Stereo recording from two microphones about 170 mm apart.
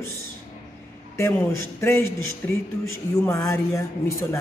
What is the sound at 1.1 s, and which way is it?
Speech, 15° left (ahead or behind).